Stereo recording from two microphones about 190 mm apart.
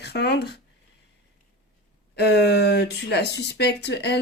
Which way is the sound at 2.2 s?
60° left (ahead or behind).